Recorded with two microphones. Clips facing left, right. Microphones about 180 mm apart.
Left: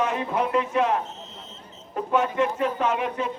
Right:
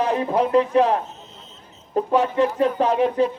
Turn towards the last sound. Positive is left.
turn(degrees=-35)  # may be behind; listen again after turning